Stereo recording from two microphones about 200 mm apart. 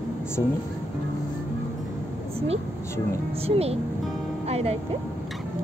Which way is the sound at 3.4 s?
30° right (ahead or behind).